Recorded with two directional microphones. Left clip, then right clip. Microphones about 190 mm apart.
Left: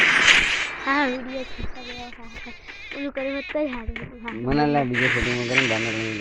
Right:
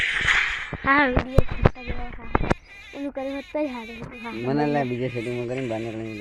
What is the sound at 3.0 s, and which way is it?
Speech, 15° right (ahead or behind).